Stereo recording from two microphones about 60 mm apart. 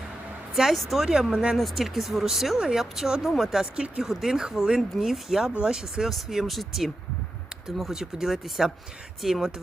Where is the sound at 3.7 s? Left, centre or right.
Centre.